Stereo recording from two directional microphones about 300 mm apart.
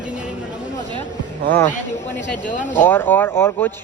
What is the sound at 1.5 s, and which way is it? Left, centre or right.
Speech, centre.